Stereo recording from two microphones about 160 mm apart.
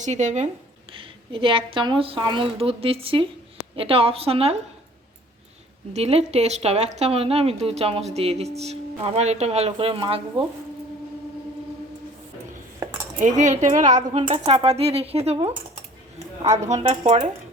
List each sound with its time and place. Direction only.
0.0 s speech: 50° right (ahead or behind)
0.9 s a woman's voice: 30° right (ahead or behind)
5.9 s a woman's voice: 40° right (ahead or behind)
13.1 s a woman's voice: 50° right (ahead or behind)
16.1 s a sound: 45° right (ahead or behind)
16.6 s speech: 45° right (ahead or behind)